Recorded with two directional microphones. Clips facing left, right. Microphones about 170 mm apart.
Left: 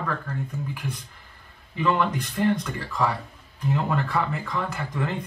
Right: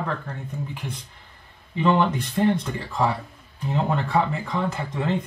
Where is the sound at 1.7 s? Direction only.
25° right (ahead or behind).